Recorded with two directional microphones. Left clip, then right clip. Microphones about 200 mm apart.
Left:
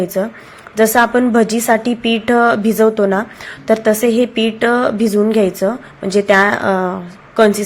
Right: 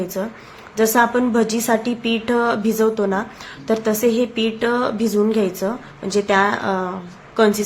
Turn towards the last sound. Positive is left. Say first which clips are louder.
# left 5 dB
turn(degrees=25)  # may be behind; listen again after turning